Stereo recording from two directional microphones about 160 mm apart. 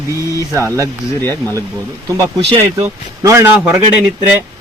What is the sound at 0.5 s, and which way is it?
Speech, 15° right (ahead or behind).